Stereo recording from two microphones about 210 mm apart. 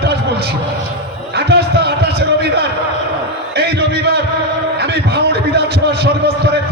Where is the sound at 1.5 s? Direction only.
50° right (ahead or behind).